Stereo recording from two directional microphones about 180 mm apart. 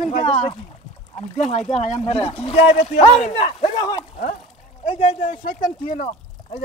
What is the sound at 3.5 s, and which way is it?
Speech, 25° left (ahead or behind).